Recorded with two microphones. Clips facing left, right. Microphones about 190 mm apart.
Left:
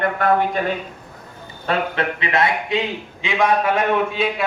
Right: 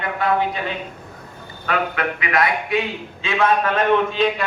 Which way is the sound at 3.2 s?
15° left (ahead or behind).